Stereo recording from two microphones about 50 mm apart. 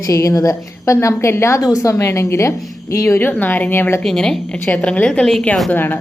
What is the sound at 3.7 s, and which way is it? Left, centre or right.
Speech, left.